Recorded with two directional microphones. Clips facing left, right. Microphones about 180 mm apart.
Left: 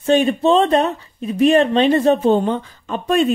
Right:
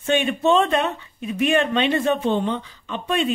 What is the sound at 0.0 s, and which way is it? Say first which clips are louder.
A woman's voice: left 5 dB; 35° left (ahead or behind).